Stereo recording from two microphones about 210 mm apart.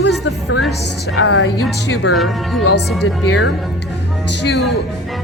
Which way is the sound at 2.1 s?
Centre (ahead or behind).